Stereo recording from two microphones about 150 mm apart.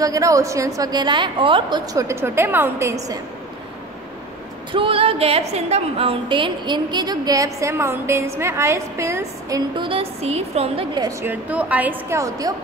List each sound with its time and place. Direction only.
0.0 s a woman's voice: 25° right (ahead or behind)
2.0 s a woman's voice: 15° right (ahead or behind)
4.7 s a woman's voice: 35° right (ahead or behind); by 9.6 s 20° right (ahead or behind)
9.8 s a woman's voice: 35° right (ahead or behind)
11.0 s a woman's voice: 20° right (ahead or behind)